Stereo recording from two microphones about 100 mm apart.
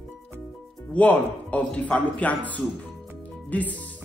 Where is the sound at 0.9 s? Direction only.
15° left (ahead or behind).